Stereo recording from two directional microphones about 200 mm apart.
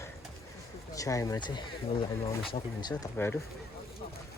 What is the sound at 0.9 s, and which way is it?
Speech, 15° left (ahead or behind).